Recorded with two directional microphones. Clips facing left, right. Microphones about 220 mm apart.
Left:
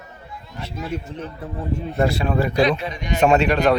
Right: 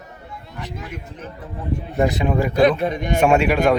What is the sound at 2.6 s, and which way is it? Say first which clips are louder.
Speech: right 3 dB; 55° right (ahead or behind).